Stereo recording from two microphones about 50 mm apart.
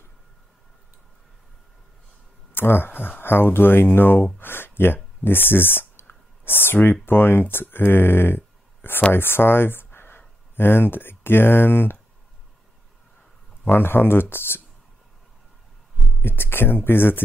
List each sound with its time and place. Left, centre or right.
2.5 s speech: left
13.7 s speech: left
16.2 s speech: left